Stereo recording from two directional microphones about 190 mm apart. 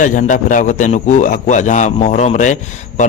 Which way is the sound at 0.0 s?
45° left (ahead or behind).